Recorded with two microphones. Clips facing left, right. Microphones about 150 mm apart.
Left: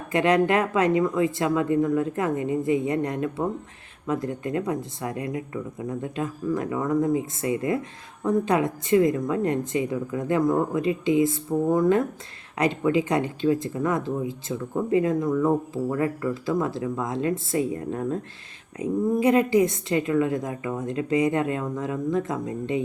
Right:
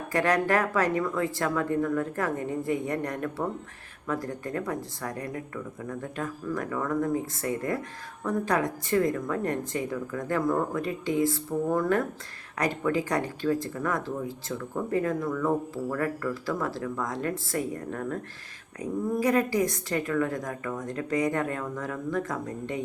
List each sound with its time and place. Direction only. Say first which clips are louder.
0.1 s speech: left 4 dB; 20° left (ahead or behind)
18.8 s speech: left 5 dB; 25° left (ahead or behind)